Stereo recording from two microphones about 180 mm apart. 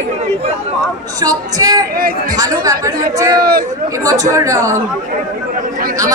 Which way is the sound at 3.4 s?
55° right (ahead or behind).